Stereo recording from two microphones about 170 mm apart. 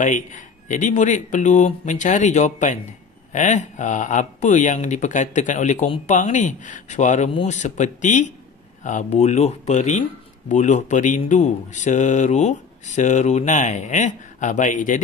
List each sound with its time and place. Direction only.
0.0 s speech: 45° left (ahead or behind)